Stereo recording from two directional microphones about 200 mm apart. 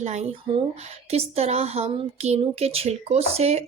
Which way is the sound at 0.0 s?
35° right (ahead or behind).